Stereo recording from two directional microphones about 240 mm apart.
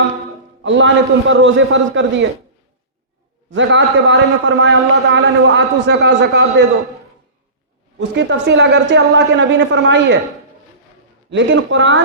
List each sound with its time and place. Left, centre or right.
0.6 s a man's voice: right
3.5 s a man's voice: right
8.1 s a man's voice: right
11.3 s a man's voice: right